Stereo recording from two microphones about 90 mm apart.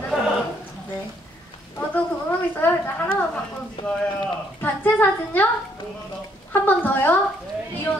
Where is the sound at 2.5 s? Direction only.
25° left (ahead or behind).